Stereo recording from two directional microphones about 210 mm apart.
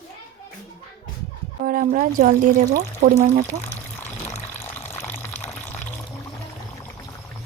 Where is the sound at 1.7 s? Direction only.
40° right (ahead or behind).